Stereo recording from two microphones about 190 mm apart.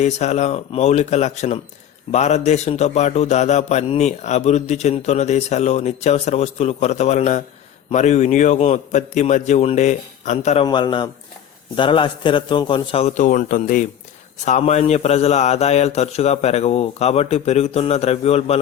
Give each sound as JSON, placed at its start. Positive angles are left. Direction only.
{"t": 0.0, "sound": "a man's voice", "side_deg": 35}